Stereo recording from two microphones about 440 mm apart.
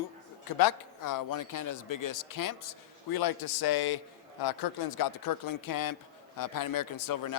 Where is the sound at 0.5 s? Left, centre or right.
Left.